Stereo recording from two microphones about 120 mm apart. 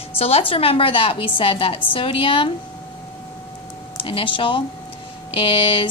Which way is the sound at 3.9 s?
45° left (ahead or behind).